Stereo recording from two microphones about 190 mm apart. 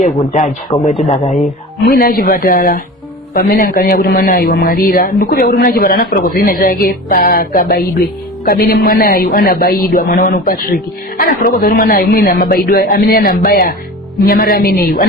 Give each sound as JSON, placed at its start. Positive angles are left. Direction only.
{"t": 0.0, "sound": "a man's voice", "side_deg": 45}
{"t": 0.7, "sound": "speech", "side_deg": 15}
{"t": 1.9, "sound": "a man's voice", "side_deg": 50}